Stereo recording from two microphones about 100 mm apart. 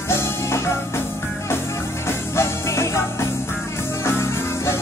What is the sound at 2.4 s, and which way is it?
Music, 25° left (ahead or behind).